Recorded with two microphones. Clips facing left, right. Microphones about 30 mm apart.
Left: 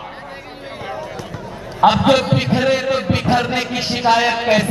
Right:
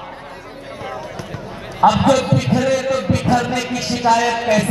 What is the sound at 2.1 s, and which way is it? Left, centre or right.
A man's voice, left.